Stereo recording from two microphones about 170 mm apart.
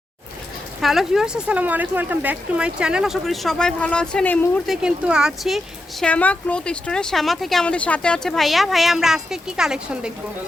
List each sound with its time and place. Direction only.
0.8 s speech: centre (ahead or behind)